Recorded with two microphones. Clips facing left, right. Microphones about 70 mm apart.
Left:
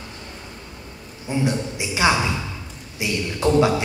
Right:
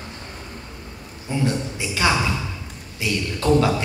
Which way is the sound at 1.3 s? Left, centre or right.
Centre.